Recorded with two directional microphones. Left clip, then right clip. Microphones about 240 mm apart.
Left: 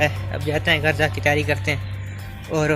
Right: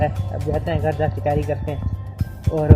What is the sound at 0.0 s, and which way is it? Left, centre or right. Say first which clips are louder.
Speech: left 1 dB; centre.